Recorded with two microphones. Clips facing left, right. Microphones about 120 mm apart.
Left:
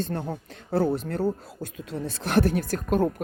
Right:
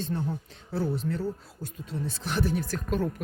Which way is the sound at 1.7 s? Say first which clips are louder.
Left 1 dB; 70° left (ahead or behind).